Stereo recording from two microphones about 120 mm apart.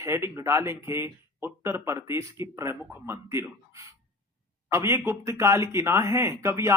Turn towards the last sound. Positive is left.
turn(degrees=-25)  # may be behind; listen again after turning